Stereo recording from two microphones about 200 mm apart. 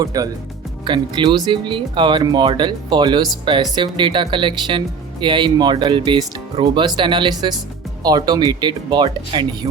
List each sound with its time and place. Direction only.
0.0 s speech: 15° right (ahead or behind)